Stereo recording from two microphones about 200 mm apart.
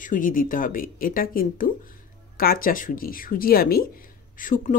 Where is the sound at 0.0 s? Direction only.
40° left (ahead or behind).